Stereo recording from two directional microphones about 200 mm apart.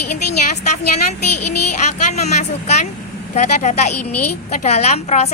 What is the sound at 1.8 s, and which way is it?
A woman's voice, 35° left (ahead or behind).